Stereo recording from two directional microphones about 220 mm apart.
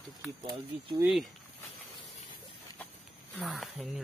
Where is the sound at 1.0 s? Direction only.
Centre (ahead or behind).